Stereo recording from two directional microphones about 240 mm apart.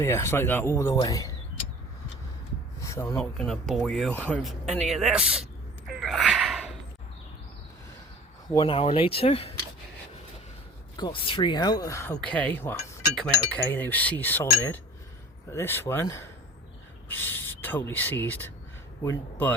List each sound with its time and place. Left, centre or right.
0.0 s speech: centre
2.8 s speech: centre
6.0 s a sound: centre
8.5 s speech: left
10.9 s speech: centre
15.4 s speech: centre
17.1 s rub: centre
19.0 s speech: centre